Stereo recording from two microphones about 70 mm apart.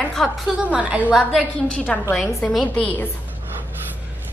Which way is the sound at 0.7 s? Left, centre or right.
Centre.